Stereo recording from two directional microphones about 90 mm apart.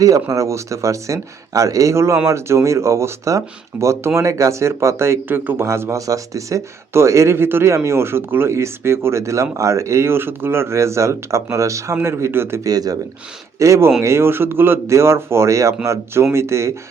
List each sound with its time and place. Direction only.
0.0 s speech: 40° right (ahead or behind)
12.6 s speech: 45° right (ahead or behind)
13.6 s speech: 30° right (ahead or behind)